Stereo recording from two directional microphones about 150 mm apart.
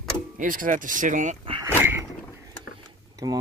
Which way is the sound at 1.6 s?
15° right (ahead or behind).